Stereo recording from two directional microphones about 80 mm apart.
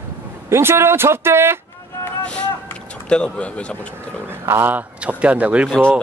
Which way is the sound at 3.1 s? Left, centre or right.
Centre.